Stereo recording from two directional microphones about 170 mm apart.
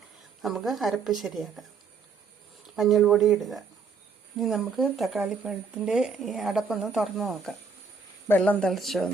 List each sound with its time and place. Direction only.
0.4 s speech: centre (ahead or behind)
2.7 s speech: centre (ahead or behind)